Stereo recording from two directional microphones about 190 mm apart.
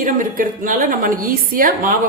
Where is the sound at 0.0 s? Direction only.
45° right (ahead or behind).